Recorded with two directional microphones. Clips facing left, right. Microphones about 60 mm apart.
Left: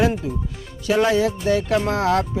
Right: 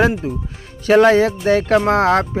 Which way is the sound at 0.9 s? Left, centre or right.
Right.